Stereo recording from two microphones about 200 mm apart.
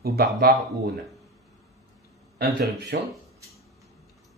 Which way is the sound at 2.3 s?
50° right (ahead or behind).